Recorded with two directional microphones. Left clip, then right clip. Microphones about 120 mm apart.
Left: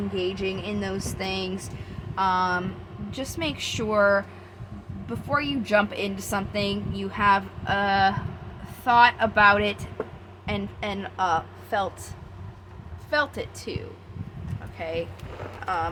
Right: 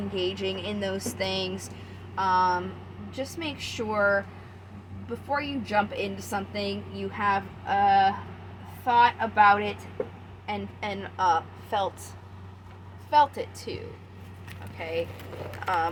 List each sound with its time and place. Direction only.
0.2 s speech: 20° left (ahead or behind)
2.1 s a woman's voice: 40° left (ahead or behind)
5.3 s a woman's voice: 50° left (ahead or behind); by 8.1 s 65° left (ahead or behind)
8.8 s a woman's voice: 85° left; by 9.7 s 65° left (ahead or behind)
10.4 s a woman's voice: 50° left (ahead or behind)
13.1 s a woman's voice: 40° left (ahead or behind)
15.6 s speech: 5° right (ahead or behind)